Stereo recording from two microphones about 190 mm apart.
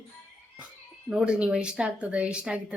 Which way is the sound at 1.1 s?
5° right (ahead or behind).